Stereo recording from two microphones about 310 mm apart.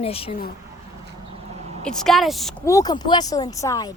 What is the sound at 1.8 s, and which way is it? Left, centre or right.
Speech, centre.